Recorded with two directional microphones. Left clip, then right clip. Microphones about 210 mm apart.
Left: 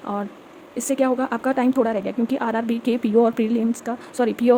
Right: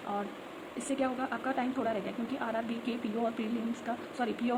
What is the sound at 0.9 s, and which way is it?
Speech, 60° left (ahead or behind).